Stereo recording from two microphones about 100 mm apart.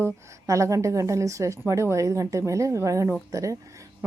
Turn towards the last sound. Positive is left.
turn(degrees=-35)  # may be behind; listen again after turning